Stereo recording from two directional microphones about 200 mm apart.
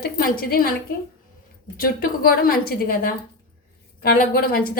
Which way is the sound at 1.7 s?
45° left (ahead or behind).